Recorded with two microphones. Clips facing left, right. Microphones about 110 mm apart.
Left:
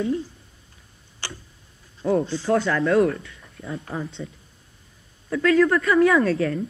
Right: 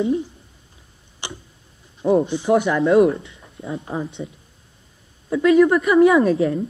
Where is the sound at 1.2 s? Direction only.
20° right (ahead or behind).